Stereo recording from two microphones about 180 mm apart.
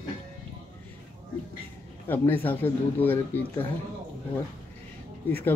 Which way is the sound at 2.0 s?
10° left (ahead or behind).